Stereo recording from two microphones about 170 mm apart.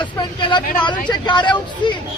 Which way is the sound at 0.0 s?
30° left (ahead or behind).